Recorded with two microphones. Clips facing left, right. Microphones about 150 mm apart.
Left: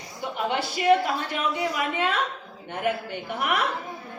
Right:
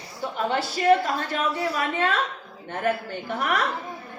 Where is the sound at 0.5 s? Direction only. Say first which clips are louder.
Right 1 dB; 15° left (ahead or behind).